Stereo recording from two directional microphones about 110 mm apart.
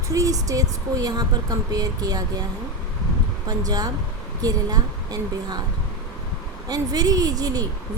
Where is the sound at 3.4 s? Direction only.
35° right (ahead or behind).